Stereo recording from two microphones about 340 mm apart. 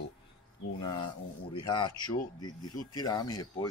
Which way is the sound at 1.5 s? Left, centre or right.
Centre.